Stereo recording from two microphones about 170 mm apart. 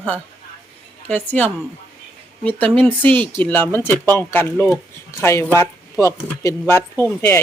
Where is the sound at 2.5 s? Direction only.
10° left (ahead or behind).